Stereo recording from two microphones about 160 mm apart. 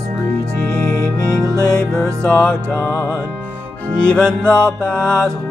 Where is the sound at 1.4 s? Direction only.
20° right (ahead or behind).